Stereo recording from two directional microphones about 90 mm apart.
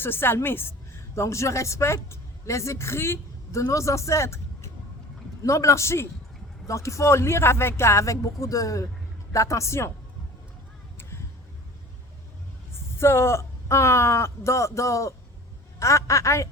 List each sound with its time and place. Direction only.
0.0 s a woman's voice: 25° left (ahead or behind)
12.7 s a woman's voice: 30° left (ahead or behind)